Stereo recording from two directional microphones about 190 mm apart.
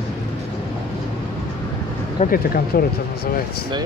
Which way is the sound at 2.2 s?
50° left (ahead or behind).